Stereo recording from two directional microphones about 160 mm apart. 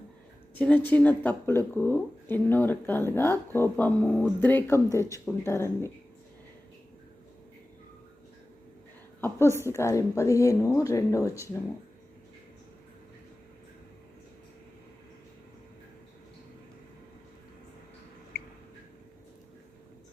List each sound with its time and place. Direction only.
0.9 s speech: 10° left (ahead or behind)
9.2 s a woman's voice: 15° left (ahead or behind)